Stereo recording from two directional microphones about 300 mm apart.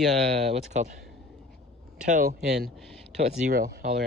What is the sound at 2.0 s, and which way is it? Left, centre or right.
Speech, right.